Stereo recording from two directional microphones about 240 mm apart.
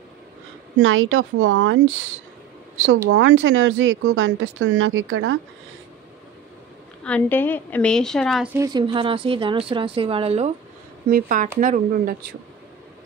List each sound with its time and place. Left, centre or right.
0.8 s speech: right
3.1 s speech: right
7.1 s a woman's voice: centre
8.5 s a woman's voice: centre
11.1 s speech: right